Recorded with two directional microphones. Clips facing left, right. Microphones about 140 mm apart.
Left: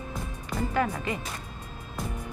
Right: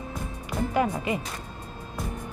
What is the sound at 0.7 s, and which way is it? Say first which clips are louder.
Speech: right 3 dB; 15° right (ahead or behind).